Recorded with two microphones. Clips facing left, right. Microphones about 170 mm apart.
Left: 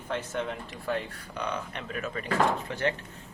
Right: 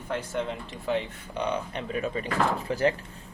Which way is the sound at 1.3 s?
30° right (ahead or behind).